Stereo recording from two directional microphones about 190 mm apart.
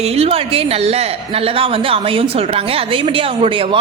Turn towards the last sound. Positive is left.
turn(degrees=-25)  # may be behind; listen again after turning